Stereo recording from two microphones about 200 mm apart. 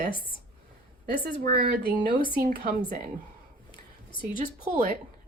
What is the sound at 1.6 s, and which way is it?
Speech, 50° right (ahead or behind).